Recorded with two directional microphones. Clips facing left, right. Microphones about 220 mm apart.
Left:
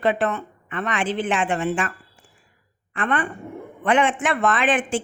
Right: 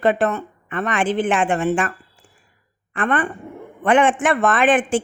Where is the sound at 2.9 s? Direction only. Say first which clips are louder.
Right 3 dB; 50° right (ahead or behind).